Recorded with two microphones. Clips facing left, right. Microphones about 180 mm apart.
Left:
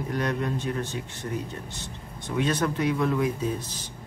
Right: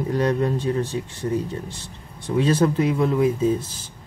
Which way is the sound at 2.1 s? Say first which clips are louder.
Right 7 dB; 30° right (ahead or behind).